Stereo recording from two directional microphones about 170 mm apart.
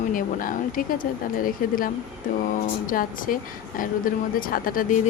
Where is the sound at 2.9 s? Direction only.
55° left (ahead or behind).